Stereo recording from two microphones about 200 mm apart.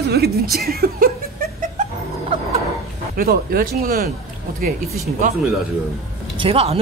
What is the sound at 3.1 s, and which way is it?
Speech, 45° right (ahead or behind).